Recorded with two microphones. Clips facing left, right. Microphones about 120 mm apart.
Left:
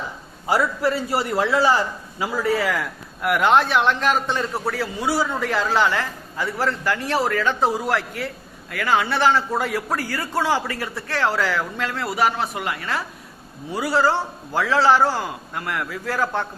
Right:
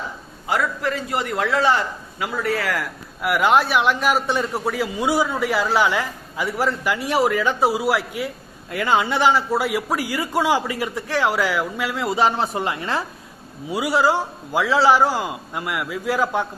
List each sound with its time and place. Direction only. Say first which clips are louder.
0.5 s a man's voice: left 2 dB; 10° left (ahead or behind)
1.7 s speech: left 1 dB; 30° left (ahead or behind)
2.3 s speech: left 2 dB; centre (ahead or behind)
8.7 s speech: right 1 dB; 20° right (ahead or behind)
12.0 s speech: right 2 dB; 25° right (ahead or behind)
13.7 s speech: right 1 dB; 15° right (ahead or behind)